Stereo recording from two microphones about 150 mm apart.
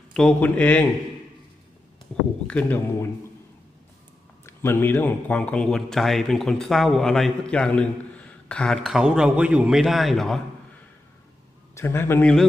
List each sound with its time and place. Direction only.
0.1 s speech: 5° left (ahead or behind)
2.1 s speech: 10° left (ahead or behind)
4.4 s speech: 15° left (ahead or behind)
11.7 s speech: 15° left (ahead or behind)